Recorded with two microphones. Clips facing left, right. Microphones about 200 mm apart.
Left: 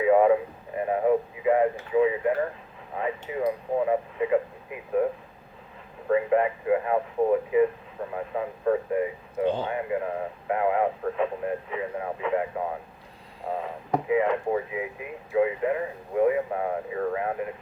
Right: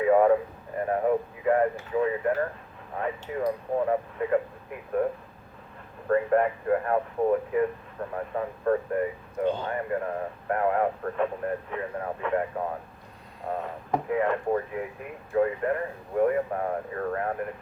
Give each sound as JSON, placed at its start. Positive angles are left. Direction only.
{"t": 0.0, "sound": "radio", "side_deg": 5}
{"t": 0.8, "sound": "speech", "side_deg": 5}
{"t": 6.1, "sound": "speech", "side_deg": 5}
{"t": 14.1, "sound": "speech", "side_deg": 5}